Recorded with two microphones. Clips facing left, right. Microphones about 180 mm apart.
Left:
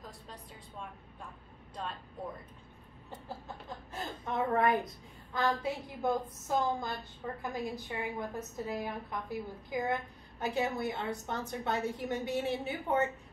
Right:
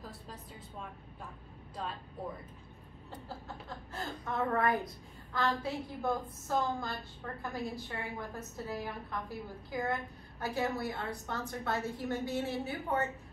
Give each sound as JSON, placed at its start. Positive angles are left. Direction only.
{"t": 3.6, "sound": "a woman's voice", "side_deg": 15}